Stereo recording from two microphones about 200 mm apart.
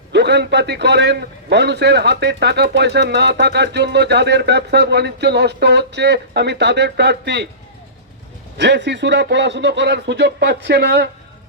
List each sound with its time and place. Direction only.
0.1 s a man's voice: 60° right (ahead or behind)
8.5 s a man's voice: 60° right (ahead or behind)